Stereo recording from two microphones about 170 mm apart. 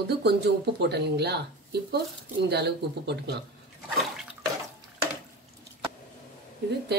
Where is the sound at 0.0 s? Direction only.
75° right (ahead or behind).